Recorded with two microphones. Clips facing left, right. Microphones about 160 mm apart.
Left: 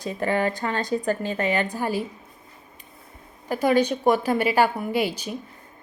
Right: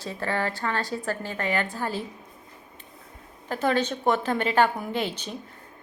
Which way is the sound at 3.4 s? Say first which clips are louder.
Left 4 dB; 10° left (ahead or behind).